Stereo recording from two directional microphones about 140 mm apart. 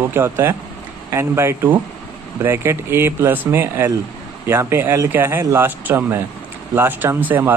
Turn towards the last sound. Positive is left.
turn(degrees=-15)  # may be behind; listen again after turning